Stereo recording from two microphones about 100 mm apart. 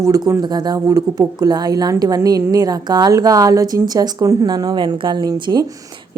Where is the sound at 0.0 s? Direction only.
35° right (ahead or behind).